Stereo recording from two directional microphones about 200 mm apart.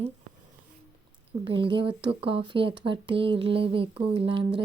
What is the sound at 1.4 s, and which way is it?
Speech, 25° right (ahead or behind).